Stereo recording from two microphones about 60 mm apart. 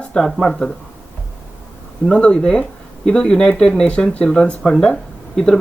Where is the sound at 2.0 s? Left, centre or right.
Centre.